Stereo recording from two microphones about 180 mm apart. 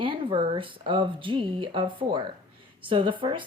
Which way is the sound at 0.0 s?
30° right (ahead or behind).